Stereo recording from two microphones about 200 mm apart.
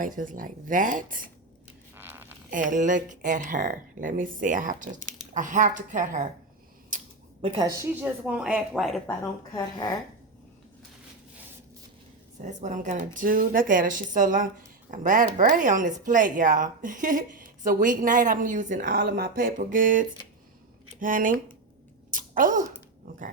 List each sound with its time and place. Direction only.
0.0 s a woman's voice: 40° right (ahead or behind)
2.0 s zipper: 10° right (ahead or behind)
2.5 s a woman's voice: 40° right (ahead or behind)
6.9 s camera: 40° right (ahead or behind)
7.4 s a woman's voice: 25° right (ahead or behind)
7.8 s speech: 10° right (ahead or behind)
12.4 s a woman's voice: 35° right (ahead or behind)
22.1 s a sound: 40° right (ahead or behind)